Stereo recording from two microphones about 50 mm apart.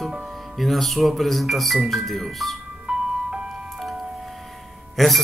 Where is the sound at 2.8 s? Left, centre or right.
Centre.